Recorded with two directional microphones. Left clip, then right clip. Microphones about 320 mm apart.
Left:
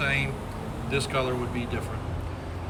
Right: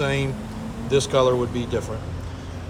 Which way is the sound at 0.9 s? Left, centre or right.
Centre.